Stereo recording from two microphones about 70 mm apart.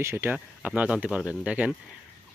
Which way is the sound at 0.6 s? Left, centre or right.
Right.